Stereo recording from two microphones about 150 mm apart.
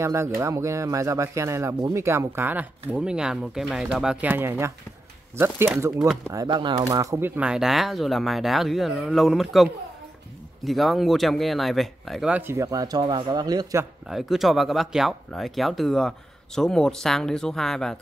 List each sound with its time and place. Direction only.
0.0 s speech: 20° right (ahead or behind)
6.2 s speech: 25° right (ahead or behind)
14.0 s speech: centre (ahead or behind)